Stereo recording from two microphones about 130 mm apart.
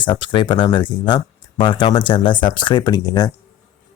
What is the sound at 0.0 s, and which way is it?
Speech, 40° left (ahead or behind).